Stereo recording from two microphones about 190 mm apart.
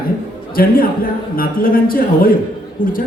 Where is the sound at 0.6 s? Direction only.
50° left (ahead or behind).